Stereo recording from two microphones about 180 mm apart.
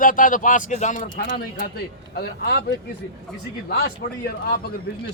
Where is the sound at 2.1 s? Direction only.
60° left (ahead or behind).